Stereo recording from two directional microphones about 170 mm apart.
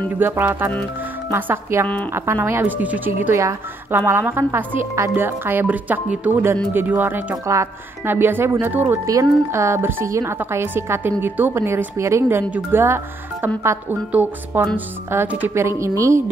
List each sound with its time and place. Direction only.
0.2 s speech: 10° right (ahead or behind)